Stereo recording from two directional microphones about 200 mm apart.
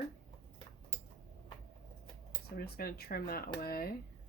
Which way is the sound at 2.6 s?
50° left (ahead or behind).